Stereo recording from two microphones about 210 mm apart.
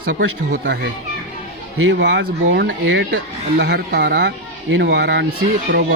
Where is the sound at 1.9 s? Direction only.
55° right (ahead or behind).